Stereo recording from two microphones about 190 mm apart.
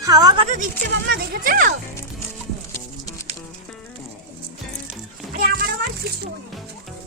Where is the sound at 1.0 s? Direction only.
55° right (ahead or behind).